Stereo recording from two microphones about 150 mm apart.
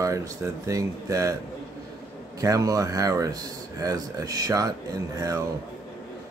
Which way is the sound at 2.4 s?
20° right (ahead or behind).